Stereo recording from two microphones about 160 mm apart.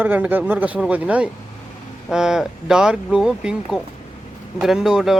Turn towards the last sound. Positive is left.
turn(degrees=-5)  # may be behind; listen again after turning